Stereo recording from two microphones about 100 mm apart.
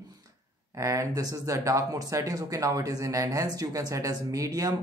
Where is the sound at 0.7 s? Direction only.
30° right (ahead or behind).